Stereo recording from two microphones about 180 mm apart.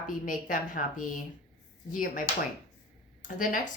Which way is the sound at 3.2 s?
45° left (ahead or behind).